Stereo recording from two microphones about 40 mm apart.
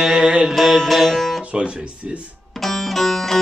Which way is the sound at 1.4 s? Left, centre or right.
Right.